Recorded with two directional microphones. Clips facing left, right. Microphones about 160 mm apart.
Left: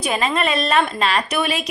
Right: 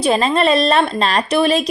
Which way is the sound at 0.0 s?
30° right (ahead or behind).